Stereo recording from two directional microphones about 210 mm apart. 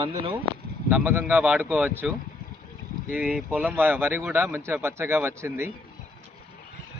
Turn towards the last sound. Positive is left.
turn(degrees=-10)  # may be behind; listen again after turning